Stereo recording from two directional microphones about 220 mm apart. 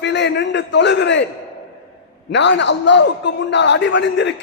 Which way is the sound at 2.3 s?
55° left (ahead or behind).